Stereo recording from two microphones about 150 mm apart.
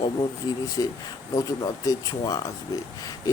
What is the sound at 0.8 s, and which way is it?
Speech, 25° left (ahead or behind).